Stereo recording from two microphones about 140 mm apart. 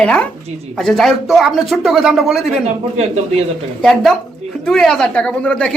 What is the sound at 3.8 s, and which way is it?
Speech, 5° left (ahead or behind).